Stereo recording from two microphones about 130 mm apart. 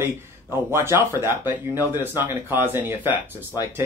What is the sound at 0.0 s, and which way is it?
A man's voice, 20° right (ahead or behind).